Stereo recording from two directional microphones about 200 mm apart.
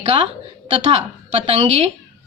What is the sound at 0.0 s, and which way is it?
A woman's voice, 30° right (ahead or behind).